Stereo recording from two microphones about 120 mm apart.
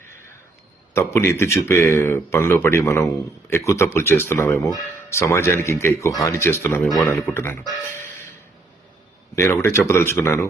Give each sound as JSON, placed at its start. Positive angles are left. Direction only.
{"t": 0.9, "sound": "speech", "side_deg": 20}
{"t": 9.3, "sound": "speech", "side_deg": 25}